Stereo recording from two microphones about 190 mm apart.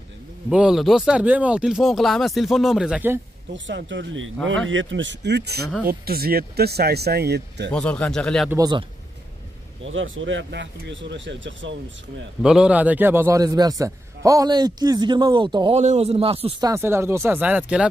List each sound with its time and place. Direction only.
0.5 s speech: 5° right (ahead or behind)
3.5 s speech: 75° right (ahead or behind)
7.7 s speech: 5° left (ahead or behind)
8.5 s a man's voice: 20° right (ahead or behind)
9.8 s speech: 90° right
12.4 s a man's voice: 5° right (ahead or behind); by 15.8 s 25° right (ahead or behind)
15.8 s a man's voice: 35° right (ahead or behind)
16.6 s speech: 15° right (ahead or behind)